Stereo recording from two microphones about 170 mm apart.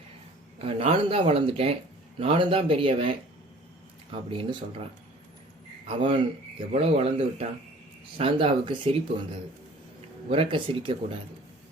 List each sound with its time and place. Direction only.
0.6 s speech: 35° right (ahead or behind)
4.1 s speech: 30° right (ahead or behind)
5.9 s speech: 35° right (ahead or behind)
10.2 s speech: 35° right (ahead or behind)